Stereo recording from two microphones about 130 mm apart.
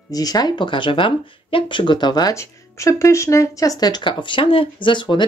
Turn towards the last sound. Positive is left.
turn(degrees=40)  # may be behind; listen again after turning